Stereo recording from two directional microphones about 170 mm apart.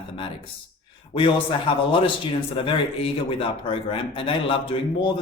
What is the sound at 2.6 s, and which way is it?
Speech, 30° left (ahead or behind).